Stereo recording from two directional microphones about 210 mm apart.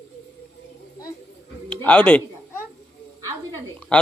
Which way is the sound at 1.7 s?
5° left (ahead or behind).